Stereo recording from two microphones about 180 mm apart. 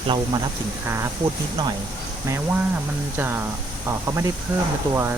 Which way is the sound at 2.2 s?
15° right (ahead or behind).